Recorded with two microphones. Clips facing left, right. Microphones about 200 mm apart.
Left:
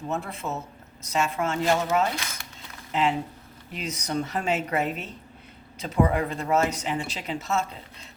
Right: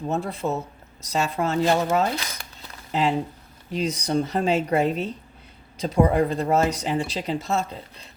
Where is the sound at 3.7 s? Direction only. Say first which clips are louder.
Right 6 dB; 35° right (ahead or behind).